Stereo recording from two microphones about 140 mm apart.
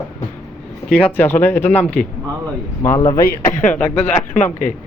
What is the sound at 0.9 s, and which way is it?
A man's voice, 10° left (ahead or behind).